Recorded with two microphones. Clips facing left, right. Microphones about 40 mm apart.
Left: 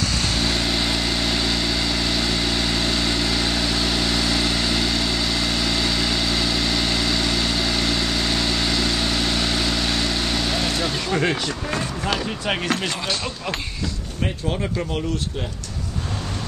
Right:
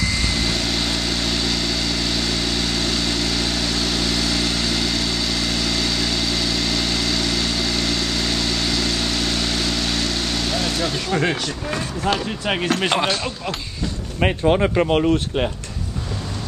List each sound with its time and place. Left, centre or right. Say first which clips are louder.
0.1 s vehicle: even; centre
12.1 s speech: right 3 dB; centre
14.2 s speech: right 8 dB; right